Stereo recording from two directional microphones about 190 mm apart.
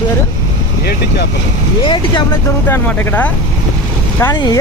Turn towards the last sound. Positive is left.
turn(degrees=20)  # may be behind; listen again after turning